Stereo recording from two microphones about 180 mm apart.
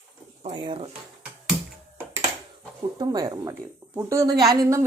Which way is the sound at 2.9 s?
20° right (ahead or behind).